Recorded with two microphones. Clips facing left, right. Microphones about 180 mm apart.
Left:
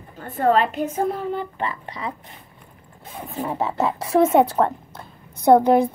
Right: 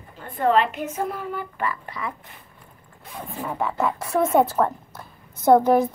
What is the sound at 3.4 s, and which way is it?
Speech, 25° left (ahead or behind).